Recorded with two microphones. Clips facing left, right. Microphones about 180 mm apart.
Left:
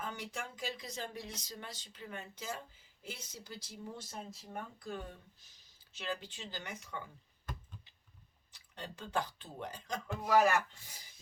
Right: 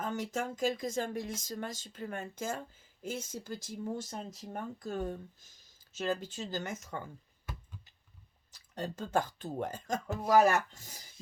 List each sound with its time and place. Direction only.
0.0 s speech: 45° right (ahead or behind)
8.4 s speech: 40° right (ahead or behind)